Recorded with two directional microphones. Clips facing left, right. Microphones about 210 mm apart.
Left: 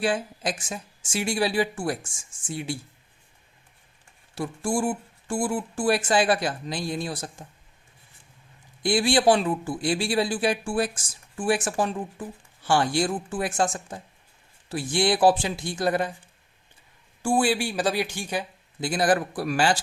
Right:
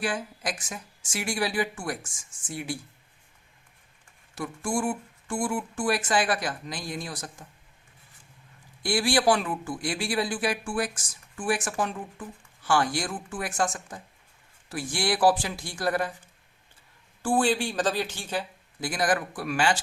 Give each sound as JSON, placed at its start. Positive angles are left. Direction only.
{"t": 0.0, "sound": "speech", "side_deg": 30}
{"t": 4.4, "sound": "speech", "side_deg": 30}
{"t": 8.8, "sound": "speech", "side_deg": 20}
{"t": 17.2, "sound": "speech", "side_deg": 10}
{"t": 18.9, "sound": "a man's voice", "side_deg": 30}